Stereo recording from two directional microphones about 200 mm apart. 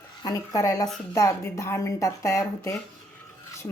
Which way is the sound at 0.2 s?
20° left (ahead or behind).